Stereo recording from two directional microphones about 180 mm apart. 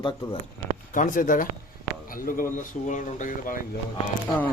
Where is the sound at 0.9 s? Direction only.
45° left (ahead or behind).